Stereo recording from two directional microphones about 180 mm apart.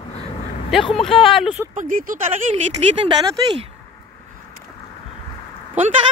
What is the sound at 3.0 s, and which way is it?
Speech, 35° right (ahead or behind).